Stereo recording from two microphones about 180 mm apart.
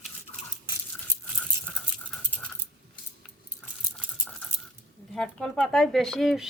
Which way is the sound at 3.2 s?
5° left (ahead or behind).